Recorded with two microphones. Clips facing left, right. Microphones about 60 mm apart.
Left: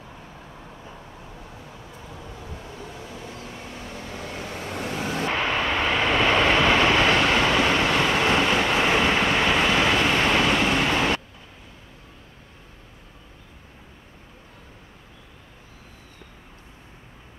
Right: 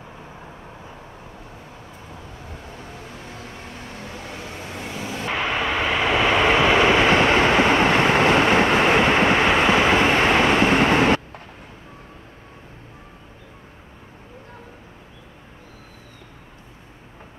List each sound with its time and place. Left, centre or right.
5.3 s vehicle: centre; by 11.4 s right